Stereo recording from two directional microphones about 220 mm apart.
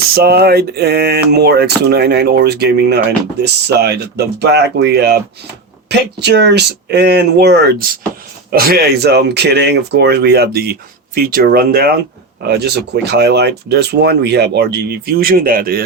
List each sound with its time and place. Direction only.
0.1 s speech: 45° right (ahead or behind)